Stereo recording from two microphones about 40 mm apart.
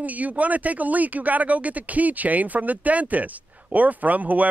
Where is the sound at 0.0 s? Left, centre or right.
Right.